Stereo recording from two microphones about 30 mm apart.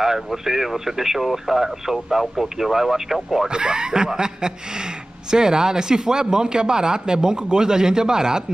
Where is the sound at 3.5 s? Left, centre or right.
Right.